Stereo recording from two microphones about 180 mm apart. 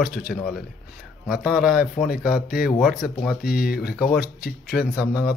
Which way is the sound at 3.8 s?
5° right (ahead or behind).